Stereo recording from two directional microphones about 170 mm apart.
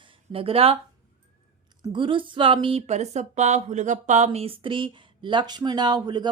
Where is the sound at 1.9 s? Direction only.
30° right (ahead or behind).